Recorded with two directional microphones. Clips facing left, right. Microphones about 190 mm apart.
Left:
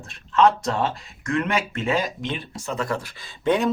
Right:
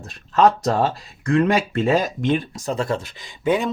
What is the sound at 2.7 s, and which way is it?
Speech, 25° right (ahead or behind).